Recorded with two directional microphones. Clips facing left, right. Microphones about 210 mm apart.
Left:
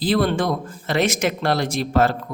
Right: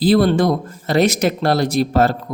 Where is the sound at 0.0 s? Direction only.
35° right (ahead or behind).